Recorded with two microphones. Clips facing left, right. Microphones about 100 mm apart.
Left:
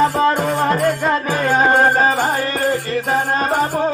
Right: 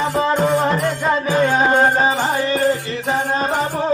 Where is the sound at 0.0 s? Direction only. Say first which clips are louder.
Left 2 dB; 45° left (ahead or behind).